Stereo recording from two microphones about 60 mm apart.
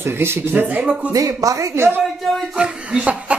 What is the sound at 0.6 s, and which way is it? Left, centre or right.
Speech, right.